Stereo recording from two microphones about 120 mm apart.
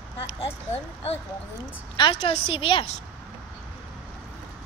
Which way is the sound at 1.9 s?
45° left (ahead or behind).